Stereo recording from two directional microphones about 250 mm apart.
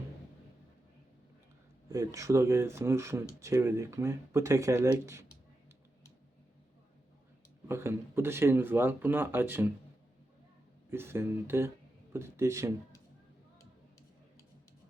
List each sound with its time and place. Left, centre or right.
1.9 s speech: centre
7.7 s speech: centre
10.9 s speech: centre